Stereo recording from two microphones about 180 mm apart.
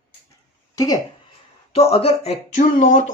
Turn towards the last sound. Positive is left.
turn(degrees=45)  # may be behind; listen again after turning